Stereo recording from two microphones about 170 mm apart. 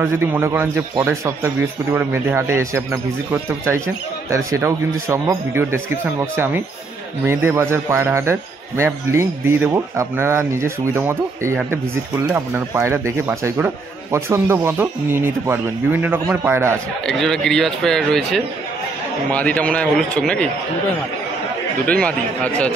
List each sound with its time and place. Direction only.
0.0 s a man's voice: 15° right (ahead or behind)
17.0 s a man's voice: centre (ahead or behind)
21.8 s a man's voice: 10° left (ahead or behind)